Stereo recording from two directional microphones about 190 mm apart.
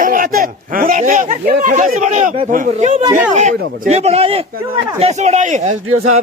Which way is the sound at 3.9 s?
35° right (ahead or behind).